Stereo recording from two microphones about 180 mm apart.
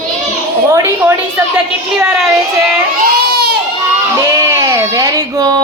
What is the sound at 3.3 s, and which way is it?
Baby cry, 60° right (ahead or behind).